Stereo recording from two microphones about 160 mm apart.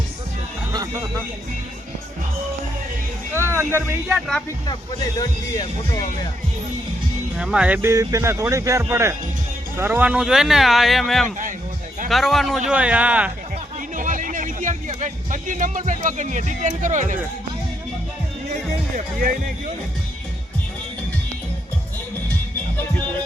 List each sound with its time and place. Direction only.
0.7 s a sound: 25° right (ahead or behind)
3.3 s music: 15° right (ahead or behind)
4.1 s speech: 5° left (ahead or behind)
5.2 s speech: 25° left (ahead or behind)
7.3 s speech: 5° right (ahead or behind)
13.9 s music: 55° right (ahead or behind)
18.9 s speech: 60° right (ahead or behind)